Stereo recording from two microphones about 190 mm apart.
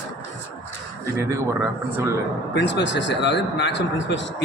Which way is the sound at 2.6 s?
65° left (ahead or behind).